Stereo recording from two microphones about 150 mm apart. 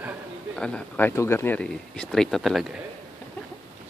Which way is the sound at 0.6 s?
10° left (ahead or behind).